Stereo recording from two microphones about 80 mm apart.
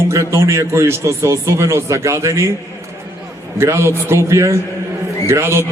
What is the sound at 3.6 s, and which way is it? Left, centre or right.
A man's voice, right.